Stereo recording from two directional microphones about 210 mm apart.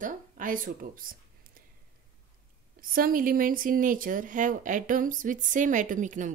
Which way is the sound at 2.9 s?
40° right (ahead or behind).